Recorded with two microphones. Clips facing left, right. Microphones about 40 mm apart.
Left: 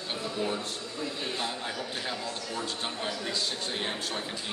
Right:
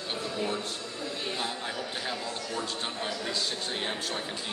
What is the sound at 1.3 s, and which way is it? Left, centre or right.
A man's voice, centre.